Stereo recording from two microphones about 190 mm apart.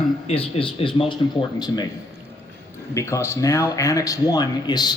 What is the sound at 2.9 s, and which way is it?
Speech, 15° left (ahead or behind).